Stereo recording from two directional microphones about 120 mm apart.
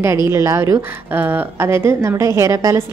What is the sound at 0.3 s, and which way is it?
A woman's voice, 25° right (ahead or behind).